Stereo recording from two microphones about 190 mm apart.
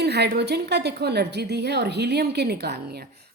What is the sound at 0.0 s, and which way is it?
A woman's voice, 60° right (ahead or behind).